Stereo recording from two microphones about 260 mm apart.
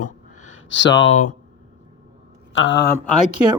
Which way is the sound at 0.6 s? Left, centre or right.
Left.